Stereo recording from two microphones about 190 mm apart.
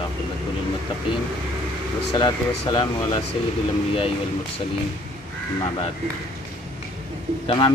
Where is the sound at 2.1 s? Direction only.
25° left (ahead or behind).